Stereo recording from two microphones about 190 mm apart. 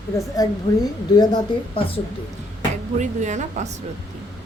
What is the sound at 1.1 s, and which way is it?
Speech, 20° left (ahead or behind).